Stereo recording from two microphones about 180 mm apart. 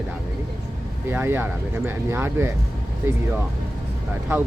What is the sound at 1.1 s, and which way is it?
Speech, 10° right (ahead or behind).